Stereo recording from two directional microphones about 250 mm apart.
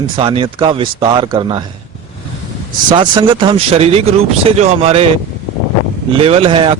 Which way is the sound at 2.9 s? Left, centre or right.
Centre.